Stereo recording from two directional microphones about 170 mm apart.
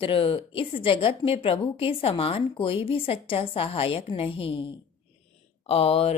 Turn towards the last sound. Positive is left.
turn(degrees=35)  # may be behind; listen again after turning